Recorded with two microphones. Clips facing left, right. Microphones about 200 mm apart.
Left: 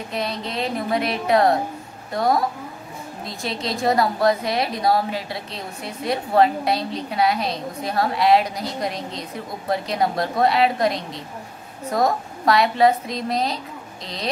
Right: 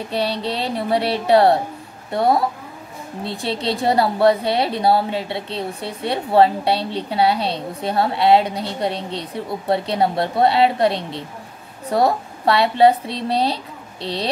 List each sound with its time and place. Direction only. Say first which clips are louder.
0.1 s a woman's voice: right 5 dB; 30° right (ahead or behind)